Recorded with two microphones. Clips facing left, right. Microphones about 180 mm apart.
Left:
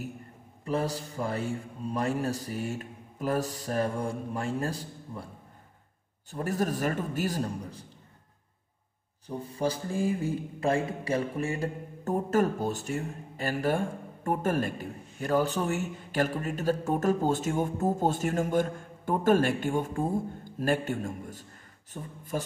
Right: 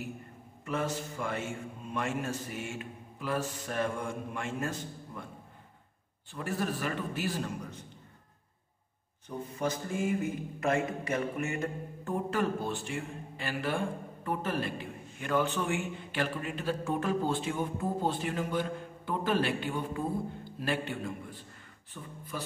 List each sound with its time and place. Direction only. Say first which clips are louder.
0.7 s a man's voice: left 3 dB; 35° left (ahead or behind)
6.3 s a man's voice: left 4 dB; 40° left (ahead or behind)
9.3 s speech: left 3 dB; 30° left (ahead or behind)